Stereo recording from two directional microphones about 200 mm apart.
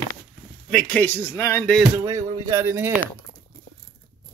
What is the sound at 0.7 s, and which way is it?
Speech, 10° left (ahead or behind).